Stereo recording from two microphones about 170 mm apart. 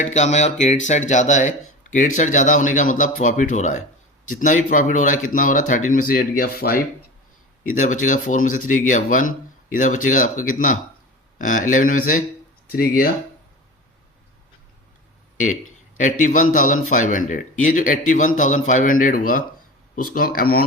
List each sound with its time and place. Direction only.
0.0 s a man's voice: 45° left (ahead or behind); by 6.7 s 60° left (ahead or behind)
7.8 s a man's voice: 50° left (ahead or behind)
16.0 s a man's voice: 50° left (ahead or behind)